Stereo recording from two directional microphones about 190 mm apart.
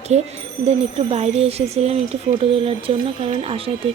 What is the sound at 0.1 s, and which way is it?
Speech, 35° right (ahead or behind).